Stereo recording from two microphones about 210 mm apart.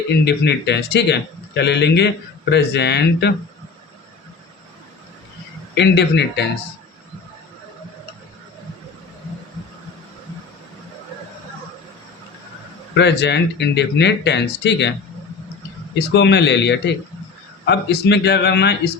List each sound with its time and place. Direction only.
0.1 s speech: 55° left (ahead or behind)
5.7 s speech: 55° left (ahead or behind)
12.9 s speech: 55° left (ahead or behind)
16.1 s speech: 55° left (ahead or behind)